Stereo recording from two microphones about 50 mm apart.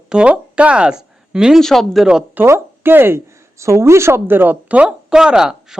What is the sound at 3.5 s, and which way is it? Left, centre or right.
A woman's voice, right.